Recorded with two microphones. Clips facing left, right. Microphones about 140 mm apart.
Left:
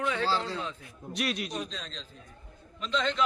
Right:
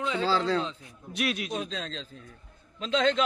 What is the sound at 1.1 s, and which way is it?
Speech, centre (ahead or behind).